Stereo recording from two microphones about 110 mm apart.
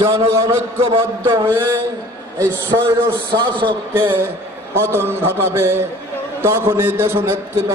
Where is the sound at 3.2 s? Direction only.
45° right (ahead or behind).